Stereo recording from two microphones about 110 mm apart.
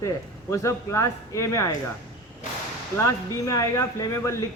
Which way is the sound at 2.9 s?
30° left (ahead or behind).